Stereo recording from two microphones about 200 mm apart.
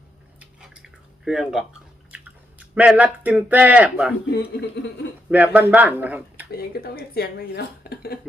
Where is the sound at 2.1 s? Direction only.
10° right (ahead or behind).